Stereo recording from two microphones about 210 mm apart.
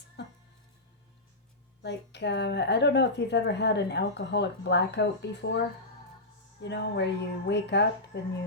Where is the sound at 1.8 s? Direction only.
55° left (ahead or behind).